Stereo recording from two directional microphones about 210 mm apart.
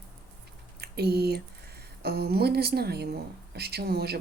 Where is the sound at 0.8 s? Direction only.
50° right (ahead or behind).